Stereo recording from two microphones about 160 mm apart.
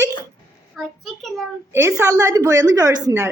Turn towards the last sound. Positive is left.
turn(degrees=-20)  # may be behind; listen again after turning